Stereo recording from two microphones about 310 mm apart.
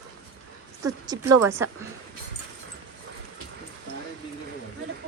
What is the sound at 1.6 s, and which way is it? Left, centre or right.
Speech, centre.